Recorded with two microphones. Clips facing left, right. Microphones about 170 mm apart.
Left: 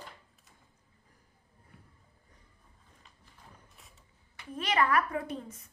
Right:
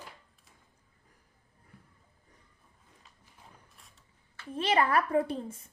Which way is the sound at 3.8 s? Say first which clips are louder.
Left 2 dB; centre (ahead or behind).